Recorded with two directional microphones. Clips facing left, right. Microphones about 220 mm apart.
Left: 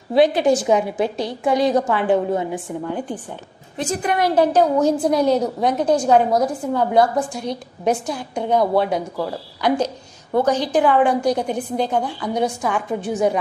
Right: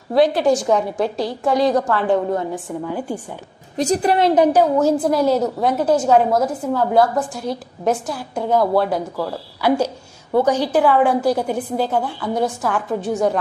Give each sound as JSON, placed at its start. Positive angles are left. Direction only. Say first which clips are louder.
{"t": 0.3, "sound": "a woman's voice", "louder": "even", "side_deg": 0}
{"t": 3.7, "sound": "a woman's voice", "louder": "right 5 dB", "side_deg": -35}
{"t": 4.4, "sound": "a woman's voice", "louder": "left 2 dB", "side_deg": -15}